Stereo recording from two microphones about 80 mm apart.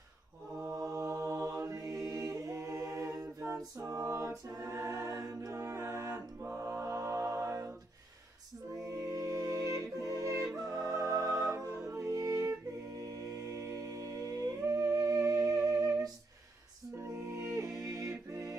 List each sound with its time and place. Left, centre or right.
0.7 s mantra: right
1.7 s a capella: right
6.6 s mantra: right
8.7 s music: right
17.6 s music: right